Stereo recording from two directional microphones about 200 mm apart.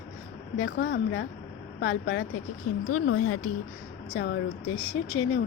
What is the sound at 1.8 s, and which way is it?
A woman's voice, 90° left.